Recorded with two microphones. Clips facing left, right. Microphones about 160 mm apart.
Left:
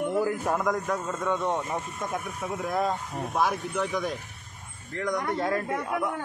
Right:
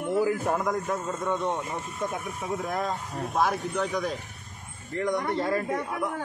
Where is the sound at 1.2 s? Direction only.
15° right (ahead or behind).